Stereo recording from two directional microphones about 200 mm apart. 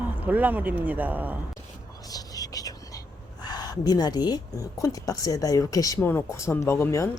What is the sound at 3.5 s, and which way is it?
Speech, 20° left (ahead or behind).